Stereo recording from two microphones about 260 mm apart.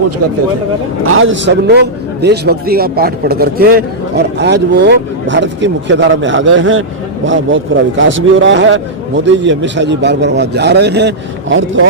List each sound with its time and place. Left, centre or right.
1.0 s a man's voice: right